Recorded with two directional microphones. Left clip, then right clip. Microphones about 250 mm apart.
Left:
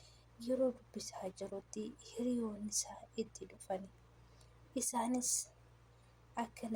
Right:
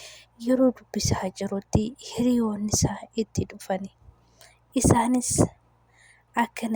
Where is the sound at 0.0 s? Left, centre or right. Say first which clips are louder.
Right 16 dB; right.